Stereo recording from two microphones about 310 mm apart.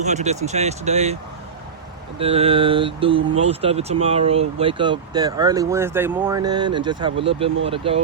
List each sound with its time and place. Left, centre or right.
0.0 s speech: right
2.1 s speech: centre